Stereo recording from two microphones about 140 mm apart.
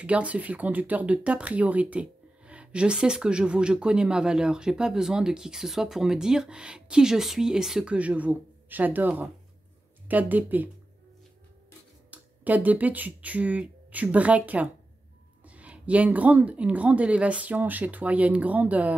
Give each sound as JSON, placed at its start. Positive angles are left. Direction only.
{"t": 0.0, "sound": "speech", "side_deg": -10}
{"t": 12.1, "sound": "speech", "side_deg": -10}